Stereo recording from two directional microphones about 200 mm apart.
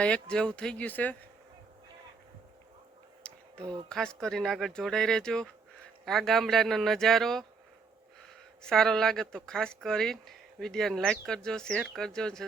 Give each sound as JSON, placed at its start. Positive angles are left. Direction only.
{"t": 0.0, "sound": "speech", "side_deg": 5}
{"t": 3.2, "sound": "a sound", "side_deg": 5}
{"t": 3.6, "sound": "speech", "side_deg": -20}
{"t": 3.8, "sound": "speech", "side_deg": 5}
{"t": 8.6, "sound": "speech", "side_deg": 0}